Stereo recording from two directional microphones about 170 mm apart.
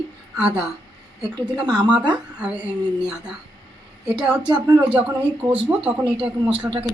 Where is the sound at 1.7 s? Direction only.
25° right (ahead or behind).